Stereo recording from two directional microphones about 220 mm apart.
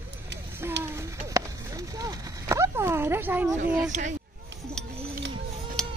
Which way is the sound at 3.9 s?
30° right (ahead or behind).